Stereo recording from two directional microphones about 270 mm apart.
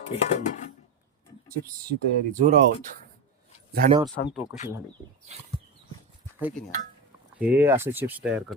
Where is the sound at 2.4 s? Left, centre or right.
Right.